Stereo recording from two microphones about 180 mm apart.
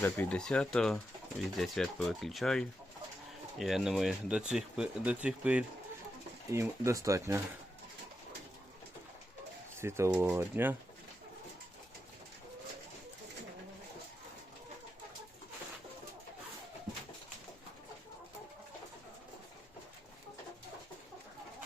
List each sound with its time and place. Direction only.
0.0 s speech: 10° left (ahead or behind); by 7.4 s 15° right (ahead or behind)
9.7 s speech: 15° right (ahead or behind)